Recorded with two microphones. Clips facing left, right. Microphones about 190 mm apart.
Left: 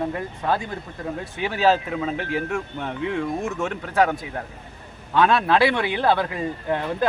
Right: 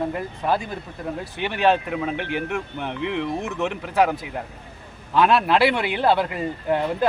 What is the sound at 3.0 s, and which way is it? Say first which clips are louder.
Speech: left 1 dB; 75° right (ahead or behind).